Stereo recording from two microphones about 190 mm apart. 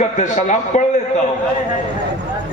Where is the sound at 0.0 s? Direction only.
40° left (ahead or behind).